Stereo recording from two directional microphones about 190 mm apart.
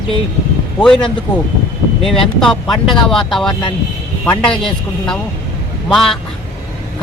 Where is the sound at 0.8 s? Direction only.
5° left (ahead or behind).